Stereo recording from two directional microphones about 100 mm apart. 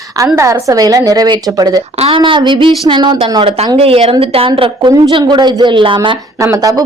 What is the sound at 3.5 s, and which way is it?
Speech, 75° right (ahead or behind).